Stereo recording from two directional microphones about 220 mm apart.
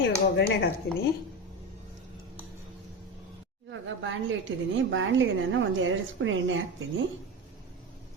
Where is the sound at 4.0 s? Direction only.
60° right (ahead or behind).